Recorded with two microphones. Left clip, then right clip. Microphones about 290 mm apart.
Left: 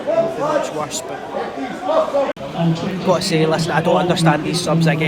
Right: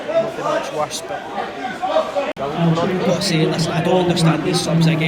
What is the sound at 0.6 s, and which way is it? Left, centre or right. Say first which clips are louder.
Speech: even; centre.